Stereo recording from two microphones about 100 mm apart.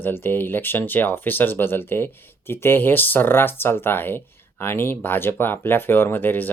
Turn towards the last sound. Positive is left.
turn(degrees=20)  # may be behind; listen again after turning